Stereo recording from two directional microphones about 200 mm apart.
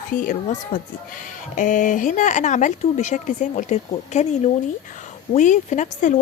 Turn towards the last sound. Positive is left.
turn(degrees=40)  # may be behind; listen again after turning